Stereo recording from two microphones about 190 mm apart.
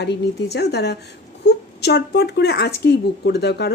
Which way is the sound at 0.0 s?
60° left (ahead or behind).